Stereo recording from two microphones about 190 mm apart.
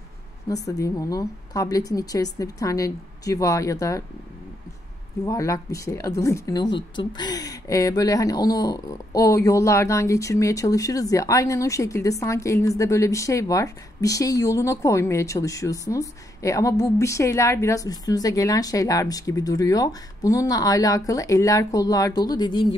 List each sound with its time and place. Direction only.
0.5 s speech: 20° left (ahead or behind)
5.2 s speech: 15° left (ahead or behind)